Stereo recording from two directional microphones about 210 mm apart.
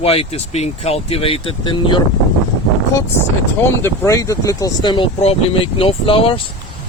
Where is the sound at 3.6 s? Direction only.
10° left (ahead or behind).